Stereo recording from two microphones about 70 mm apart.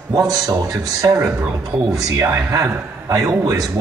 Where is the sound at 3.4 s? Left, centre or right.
Right.